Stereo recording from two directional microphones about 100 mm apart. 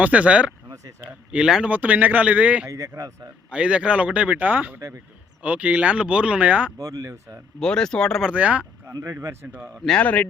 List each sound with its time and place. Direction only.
0.0 s speech: 15° right (ahead or behind)
2.6 s speech: 30° right (ahead or behind)
3.5 s speech: 10° right (ahead or behind)
6.7 s speech: 35° right (ahead or behind)
7.6 s speech: 5° left (ahead or behind)
8.2 s speech: 10° right (ahead or behind)
8.9 s speech: 30° right (ahead or behind)
9.8 s speech: 10° left (ahead or behind)